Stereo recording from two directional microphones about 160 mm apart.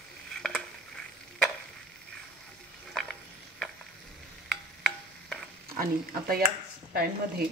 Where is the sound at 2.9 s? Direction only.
5° left (ahead or behind).